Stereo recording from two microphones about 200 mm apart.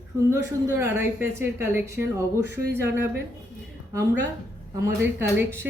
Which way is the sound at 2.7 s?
10° right (ahead or behind).